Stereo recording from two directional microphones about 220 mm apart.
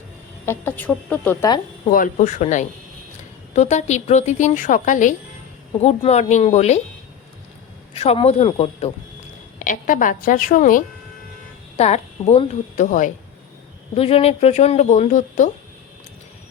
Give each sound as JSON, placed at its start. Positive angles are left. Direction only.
{"t": 0.4, "sound": "a woman's voice", "side_deg": 10}
{"t": 1.5, "sound": "a woman's voice", "side_deg": 20}
{"t": 1.9, "sound": "speech", "side_deg": 35}
{"t": 7.9, "sound": "speech", "side_deg": 25}
{"t": 9.6, "sound": "speech", "side_deg": 40}